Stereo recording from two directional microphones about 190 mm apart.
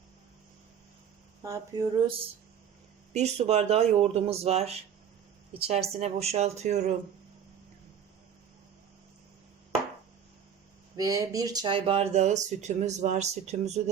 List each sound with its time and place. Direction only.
1.5 s speech: 20° right (ahead or behind)
3.1 s speech: 35° right (ahead or behind)
10.9 s speech: 20° right (ahead or behind); by 13.8 s 35° right (ahead or behind)